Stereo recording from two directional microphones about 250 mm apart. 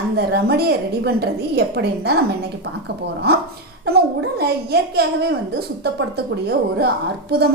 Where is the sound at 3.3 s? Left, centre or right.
Right.